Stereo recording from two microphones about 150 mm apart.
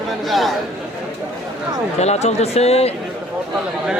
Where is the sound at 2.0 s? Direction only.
45° left (ahead or behind).